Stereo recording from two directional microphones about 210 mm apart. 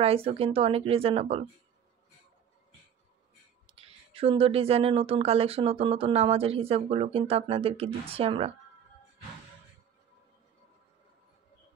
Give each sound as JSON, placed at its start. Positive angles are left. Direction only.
{"t": 0.0, "sound": "speech", "side_deg": -30}
{"t": 3.6, "sound": "speech", "side_deg": -25}